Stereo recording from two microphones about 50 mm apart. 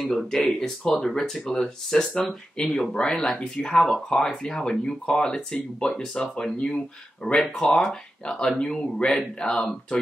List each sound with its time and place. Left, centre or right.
0.1 s speech: centre
7.3 s speech: centre
7.7 s speech: centre